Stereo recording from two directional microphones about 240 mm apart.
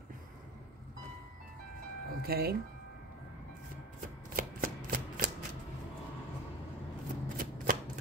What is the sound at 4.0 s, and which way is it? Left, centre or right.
Shuffling cards, right.